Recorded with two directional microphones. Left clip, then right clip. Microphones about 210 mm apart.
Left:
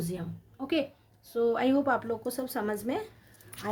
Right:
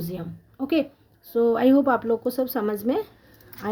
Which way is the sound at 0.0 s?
45° right (ahead or behind).